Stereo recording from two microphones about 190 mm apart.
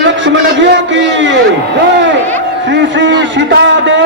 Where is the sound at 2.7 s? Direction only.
70° right (ahead or behind).